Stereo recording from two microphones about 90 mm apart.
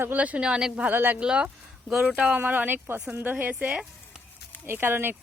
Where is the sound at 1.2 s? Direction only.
10° right (ahead or behind).